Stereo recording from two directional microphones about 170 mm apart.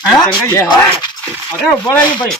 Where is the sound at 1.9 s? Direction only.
10° left (ahead or behind).